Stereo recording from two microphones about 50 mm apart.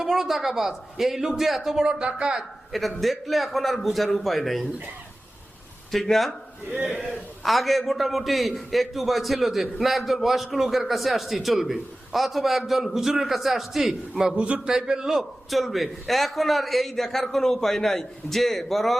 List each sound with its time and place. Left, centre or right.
0.0 s a man's voice: centre
2.7 s a man's voice: centre
5.9 s a man's voice: centre
14.3 s a man's voice: right
14.7 s speech: centre
15.1 s a man's voice: centre